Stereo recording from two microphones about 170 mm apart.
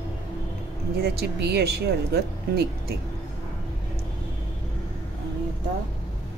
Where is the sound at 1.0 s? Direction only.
70° right (ahead or behind).